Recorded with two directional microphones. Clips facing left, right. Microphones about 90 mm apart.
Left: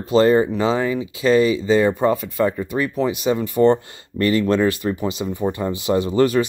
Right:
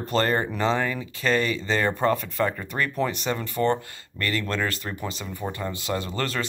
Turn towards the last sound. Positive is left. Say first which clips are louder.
# left 11 dB
turn(degrees=15)  # may be behind; listen again after turning